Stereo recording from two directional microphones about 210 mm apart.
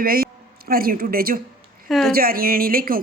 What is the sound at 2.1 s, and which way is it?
Speech, 45° right (ahead or behind).